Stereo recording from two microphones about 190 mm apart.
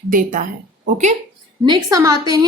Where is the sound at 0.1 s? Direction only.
45° right (ahead or behind).